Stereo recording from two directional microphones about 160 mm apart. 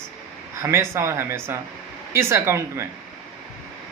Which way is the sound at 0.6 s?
15° right (ahead or behind).